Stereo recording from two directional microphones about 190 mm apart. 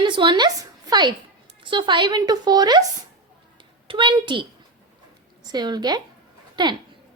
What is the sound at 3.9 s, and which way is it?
Speech, 25° right (ahead or behind).